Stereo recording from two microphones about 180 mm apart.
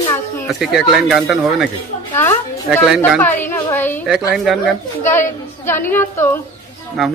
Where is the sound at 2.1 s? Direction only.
10° left (ahead or behind).